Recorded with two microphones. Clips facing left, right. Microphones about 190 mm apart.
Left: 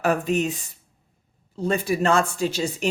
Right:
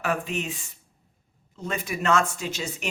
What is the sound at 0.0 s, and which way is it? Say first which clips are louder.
Speech: left 6 dB; 40° left (ahead or behind).